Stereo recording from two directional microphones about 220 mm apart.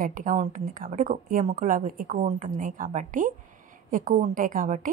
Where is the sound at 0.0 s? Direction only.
35° right (ahead or behind).